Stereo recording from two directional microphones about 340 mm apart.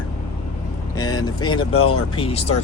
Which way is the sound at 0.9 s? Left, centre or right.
Centre.